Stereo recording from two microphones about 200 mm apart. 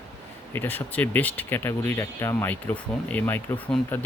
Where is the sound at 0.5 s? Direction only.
10° left (ahead or behind).